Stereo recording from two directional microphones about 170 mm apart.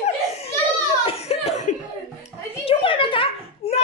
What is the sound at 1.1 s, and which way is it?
Chuckle, 40° left (ahead or behind).